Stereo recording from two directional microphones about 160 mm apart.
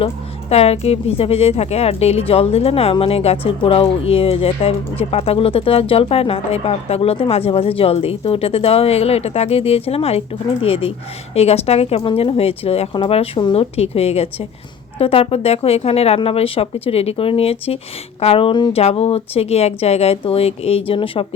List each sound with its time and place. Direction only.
0.5 s a woman's voice: 40° left (ahead or behind)